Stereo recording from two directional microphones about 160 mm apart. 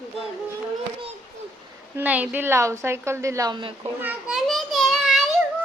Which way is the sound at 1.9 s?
10° right (ahead or behind).